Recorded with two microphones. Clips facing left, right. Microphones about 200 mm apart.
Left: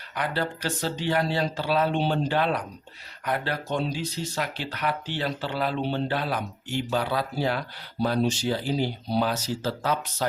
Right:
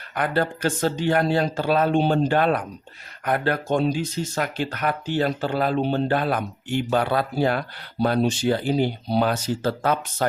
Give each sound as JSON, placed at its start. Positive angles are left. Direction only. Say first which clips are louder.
{"t": 0.1, "sound": "speech", "louder": "right 5 dB", "side_deg": -50}